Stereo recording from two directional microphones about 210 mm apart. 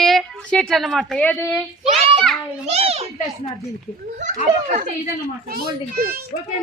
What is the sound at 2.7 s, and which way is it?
Speech, 30° right (ahead or behind).